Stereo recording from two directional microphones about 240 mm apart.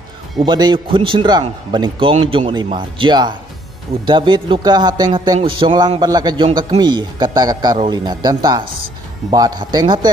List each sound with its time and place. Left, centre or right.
0.5 s a man's voice: centre